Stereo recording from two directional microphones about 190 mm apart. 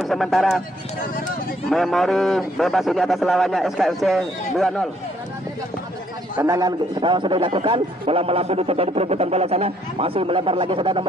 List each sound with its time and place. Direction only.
0.0 s a man's voice: centre (ahead or behind)
1.7 s a man's voice: centre (ahead or behind)
6.3 s a man's voice: 15° right (ahead or behind)